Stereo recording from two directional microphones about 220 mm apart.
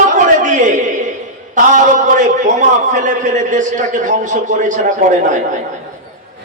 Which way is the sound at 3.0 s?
35° right (ahead or behind).